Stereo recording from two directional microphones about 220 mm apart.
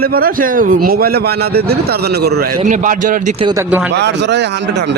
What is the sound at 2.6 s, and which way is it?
Speech, 35° right (ahead or behind).